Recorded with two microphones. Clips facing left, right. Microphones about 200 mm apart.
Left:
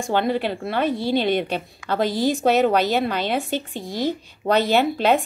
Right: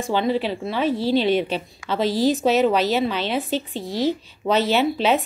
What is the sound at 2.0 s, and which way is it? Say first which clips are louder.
Speech: right 1 dB; 55° left (ahead or behind).